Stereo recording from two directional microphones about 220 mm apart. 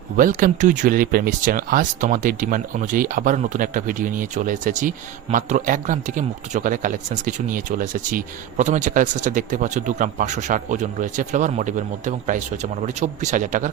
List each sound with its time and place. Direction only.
0.2 s speech: 40° right (ahead or behind)